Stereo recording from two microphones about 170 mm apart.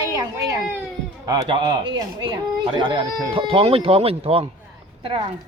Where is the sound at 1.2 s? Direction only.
25° right (ahead or behind).